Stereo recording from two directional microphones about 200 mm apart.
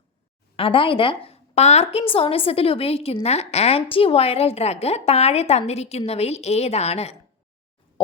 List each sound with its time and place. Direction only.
0.5 s a woman's voice: 25° left (ahead or behind)